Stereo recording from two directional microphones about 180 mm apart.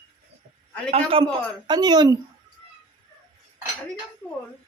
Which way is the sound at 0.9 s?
30° right (ahead or behind).